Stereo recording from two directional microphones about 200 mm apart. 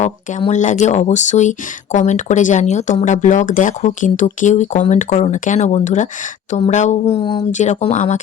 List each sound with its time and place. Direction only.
0.0 s speech: 35° left (ahead or behind)
7.5 s speech: 35° left (ahead or behind)